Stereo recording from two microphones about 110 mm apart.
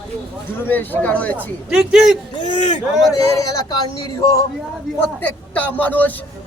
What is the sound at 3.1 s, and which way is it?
Speech, 30° left (ahead or behind).